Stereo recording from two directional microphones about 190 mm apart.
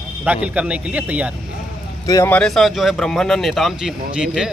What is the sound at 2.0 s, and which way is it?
Speech, 15° left (ahead or behind).